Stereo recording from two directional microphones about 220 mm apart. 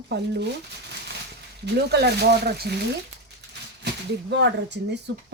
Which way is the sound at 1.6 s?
50° right (ahead or behind).